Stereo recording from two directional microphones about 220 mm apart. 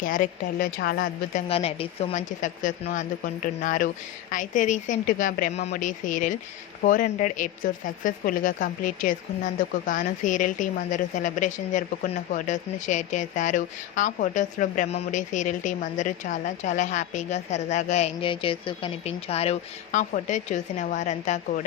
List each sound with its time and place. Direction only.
0.0 s a woman's voice: 35° left (ahead or behind)
1.5 s a woman's voice: 25° left (ahead or behind)